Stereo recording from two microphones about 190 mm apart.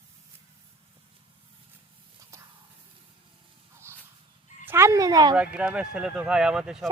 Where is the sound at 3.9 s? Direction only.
10° right (ahead or behind).